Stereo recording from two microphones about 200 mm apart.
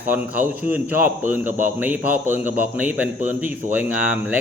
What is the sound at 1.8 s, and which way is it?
A man's voice, 10° right (ahead or behind).